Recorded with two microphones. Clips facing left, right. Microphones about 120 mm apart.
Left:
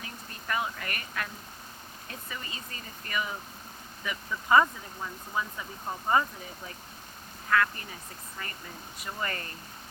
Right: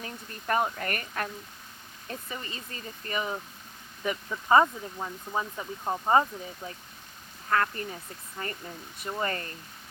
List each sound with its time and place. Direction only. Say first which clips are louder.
0.0 s speech: right 4 dB; 40° right (ahead or behind)
7.5 s speech: even; 35° right (ahead or behind)